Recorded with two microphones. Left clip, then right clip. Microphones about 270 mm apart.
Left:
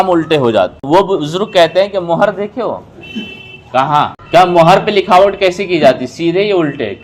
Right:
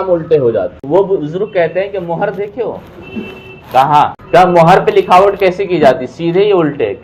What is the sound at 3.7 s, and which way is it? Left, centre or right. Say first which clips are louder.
A man's voice: right 3 dB; left.